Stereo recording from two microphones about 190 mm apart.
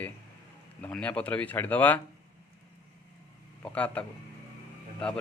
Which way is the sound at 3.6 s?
5° left (ahead or behind).